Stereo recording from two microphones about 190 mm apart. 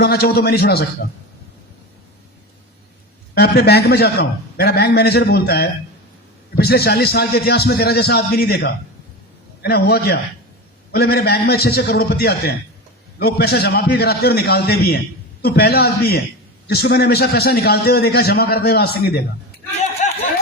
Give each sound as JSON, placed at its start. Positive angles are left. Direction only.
{"t": 0.0, "sound": "a man's voice", "side_deg": 55}
{"t": 3.3, "sound": "a man's voice", "side_deg": 55}